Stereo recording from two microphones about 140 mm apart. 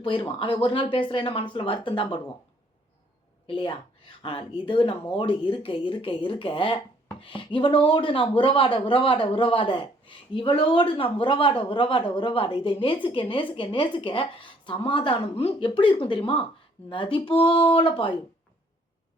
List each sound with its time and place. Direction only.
0.0 s speech: 40° left (ahead or behind)
3.4 s speech: 40° left (ahead or behind)